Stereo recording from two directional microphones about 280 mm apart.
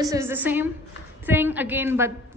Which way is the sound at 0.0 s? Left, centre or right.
Centre.